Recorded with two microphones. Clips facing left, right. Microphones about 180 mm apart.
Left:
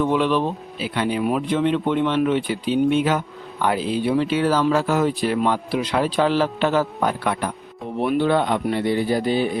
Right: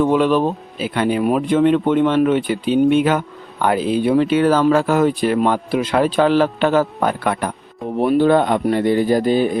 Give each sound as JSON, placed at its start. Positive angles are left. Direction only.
{"t": 0.0, "sound": "speech", "side_deg": -45}
{"t": 7.9, "sound": "speech", "side_deg": -40}